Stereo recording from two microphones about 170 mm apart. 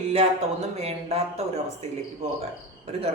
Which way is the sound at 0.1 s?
40° right (ahead or behind).